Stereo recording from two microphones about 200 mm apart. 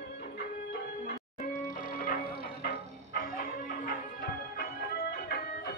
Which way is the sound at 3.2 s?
45° left (ahead or behind).